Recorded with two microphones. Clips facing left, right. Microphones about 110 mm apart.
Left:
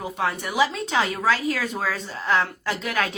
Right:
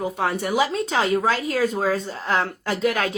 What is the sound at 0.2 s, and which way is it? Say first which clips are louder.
A woman's voice: even; 45° right (ahead or behind).